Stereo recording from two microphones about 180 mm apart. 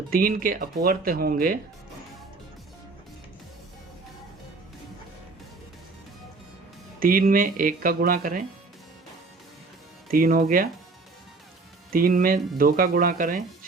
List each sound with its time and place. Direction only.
0.1 s speech: 50° right (ahead or behind)
7.0 s speech: 50° right (ahead or behind)
10.1 s speech: 55° right (ahead or behind)
11.9 s speech: 50° right (ahead or behind)